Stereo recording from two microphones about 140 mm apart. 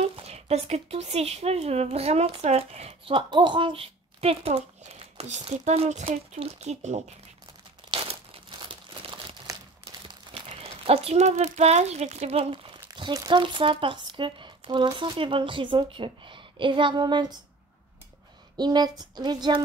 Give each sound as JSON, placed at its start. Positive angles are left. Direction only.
{"t": 0.0, "sound": "speech", "side_deg": -45}
{"t": 7.9, "sound": "crumpling", "side_deg": -40}
{"t": 10.0, "sound": "speech", "side_deg": -40}
{"t": 18.6, "sound": "a woman's voice", "side_deg": -30}